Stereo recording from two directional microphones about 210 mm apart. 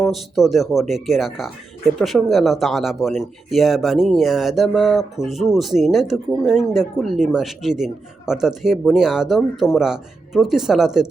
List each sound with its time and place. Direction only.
0.0 s speech: centre (ahead or behind)